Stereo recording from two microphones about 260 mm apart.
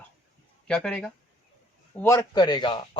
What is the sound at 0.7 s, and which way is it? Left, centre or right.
A man's voice, centre.